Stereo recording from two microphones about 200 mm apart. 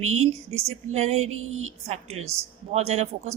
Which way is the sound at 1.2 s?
90° right.